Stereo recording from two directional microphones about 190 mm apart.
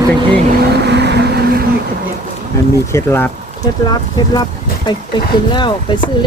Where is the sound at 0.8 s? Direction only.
60° right (ahead or behind).